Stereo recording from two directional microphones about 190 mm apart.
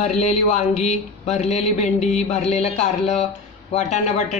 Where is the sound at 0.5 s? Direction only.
35° left (ahead or behind).